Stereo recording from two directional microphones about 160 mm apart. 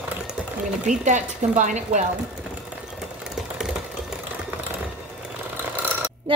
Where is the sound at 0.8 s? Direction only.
50° right (ahead or behind).